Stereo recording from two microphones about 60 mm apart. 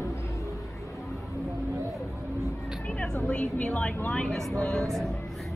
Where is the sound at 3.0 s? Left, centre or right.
Centre.